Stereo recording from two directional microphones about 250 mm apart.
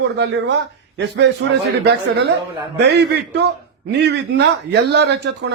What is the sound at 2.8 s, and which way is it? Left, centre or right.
Speech, right.